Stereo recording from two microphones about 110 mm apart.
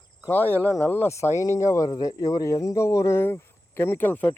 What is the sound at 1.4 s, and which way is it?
Speech, 30° left (ahead or behind).